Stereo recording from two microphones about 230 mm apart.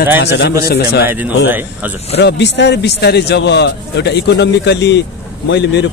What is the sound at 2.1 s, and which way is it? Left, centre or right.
A man's voice, left.